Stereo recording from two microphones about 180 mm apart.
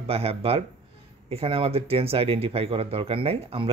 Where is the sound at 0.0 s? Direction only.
35° right (ahead or behind).